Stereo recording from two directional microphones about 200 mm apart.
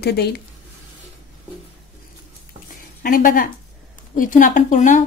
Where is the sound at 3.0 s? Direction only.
45° left (ahead or behind).